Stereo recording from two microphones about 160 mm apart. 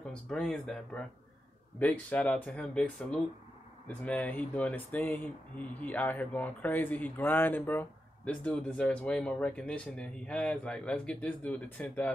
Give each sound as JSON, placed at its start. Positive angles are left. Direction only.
{"t": 0.0, "sound": "speech", "side_deg": 5}